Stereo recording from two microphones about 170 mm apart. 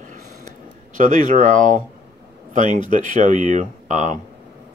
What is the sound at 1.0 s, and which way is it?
Speech, 50° right (ahead or behind).